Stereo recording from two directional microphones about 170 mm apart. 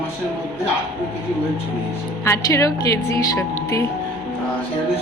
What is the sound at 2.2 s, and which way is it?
A woman's voice, 15° left (ahead or behind).